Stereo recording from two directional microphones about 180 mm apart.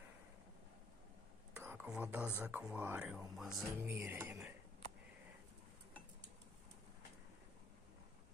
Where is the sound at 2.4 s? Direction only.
10° right (ahead or behind).